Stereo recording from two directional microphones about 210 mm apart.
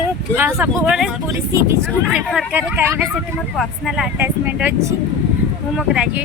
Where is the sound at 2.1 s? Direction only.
5° right (ahead or behind).